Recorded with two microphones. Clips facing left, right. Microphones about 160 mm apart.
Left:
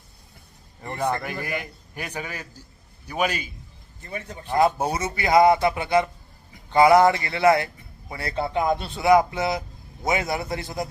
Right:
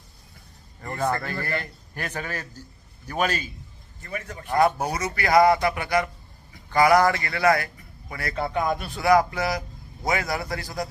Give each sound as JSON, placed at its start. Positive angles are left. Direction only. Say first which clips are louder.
{"t": 0.8, "sound": "a man's voice", "louder": "even", "side_deg": 15}
{"t": 4.0, "sound": "a man's voice", "louder": "even", "side_deg": 25}